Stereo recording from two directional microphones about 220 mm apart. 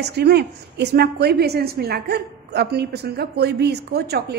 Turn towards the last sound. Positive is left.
turn(degrees=-45)  # may be behind; listen again after turning